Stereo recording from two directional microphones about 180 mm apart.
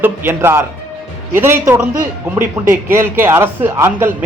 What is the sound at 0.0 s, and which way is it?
A man's voice, 10° right (ahead or behind).